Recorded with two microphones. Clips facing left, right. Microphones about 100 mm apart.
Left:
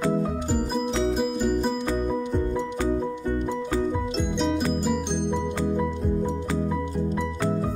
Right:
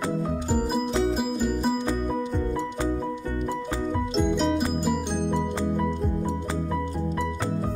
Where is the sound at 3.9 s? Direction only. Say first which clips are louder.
Right 2 dB; centre (ahead or behind).